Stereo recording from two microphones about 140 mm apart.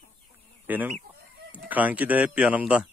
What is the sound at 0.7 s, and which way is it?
Speech, 15° right (ahead or behind).